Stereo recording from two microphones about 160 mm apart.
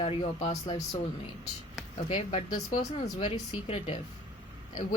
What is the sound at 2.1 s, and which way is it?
Speech, 45° left (ahead or behind).